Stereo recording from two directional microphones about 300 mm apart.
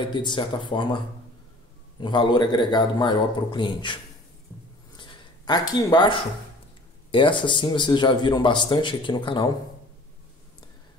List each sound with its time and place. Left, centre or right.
0.0 s a man's voice: centre
4.9 s a sound: centre
7.1 s a man's voice: centre